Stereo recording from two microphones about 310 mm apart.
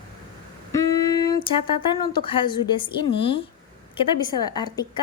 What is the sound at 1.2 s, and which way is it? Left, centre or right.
A woman's voice, centre.